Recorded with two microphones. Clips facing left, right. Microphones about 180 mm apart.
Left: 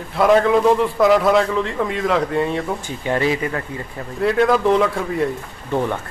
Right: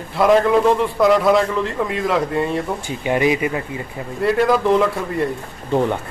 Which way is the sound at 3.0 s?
15° right (ahead or behind).